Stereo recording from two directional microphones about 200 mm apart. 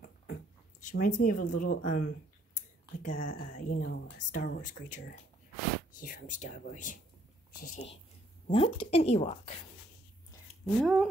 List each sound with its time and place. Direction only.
0.0 s a sound: 45° left (ahead or behind)
3.0 s speech: 40° left (ahead or behind)
8.5 s speech: 30° left (ahead or behind)
10.6 s speech: centre (ahead or behind)